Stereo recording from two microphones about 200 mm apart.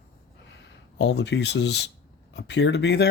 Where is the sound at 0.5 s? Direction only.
60° left (ahead or behind).